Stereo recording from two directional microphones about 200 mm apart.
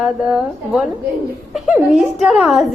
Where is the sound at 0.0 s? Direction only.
Centre (ahead or behind).